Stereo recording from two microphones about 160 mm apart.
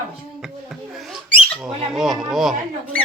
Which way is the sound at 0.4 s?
5° right (ahead or behind).